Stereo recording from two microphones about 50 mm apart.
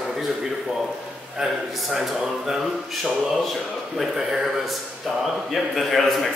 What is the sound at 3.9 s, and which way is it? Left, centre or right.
A man's voice, centre.